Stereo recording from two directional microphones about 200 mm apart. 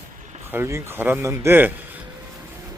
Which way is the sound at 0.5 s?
10° right (ahead or behind).